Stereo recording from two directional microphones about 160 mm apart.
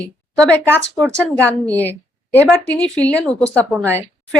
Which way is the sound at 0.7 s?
15° right (ahead or behind).